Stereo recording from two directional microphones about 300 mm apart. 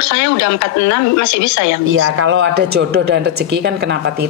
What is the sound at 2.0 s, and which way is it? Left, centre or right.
Speech, right.